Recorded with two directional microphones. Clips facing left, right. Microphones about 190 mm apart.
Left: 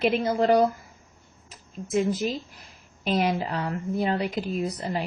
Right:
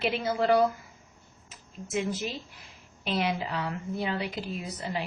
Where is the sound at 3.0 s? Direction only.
45° left (ahead or behind).